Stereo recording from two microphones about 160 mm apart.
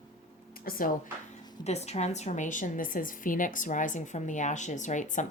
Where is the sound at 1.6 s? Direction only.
40° left (ahead or behind).